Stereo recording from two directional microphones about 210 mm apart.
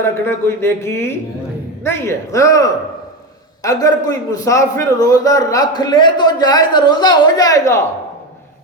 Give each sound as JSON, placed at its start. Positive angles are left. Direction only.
{"t": 0.0, "sound": "a man's voice", "side_deg": 10}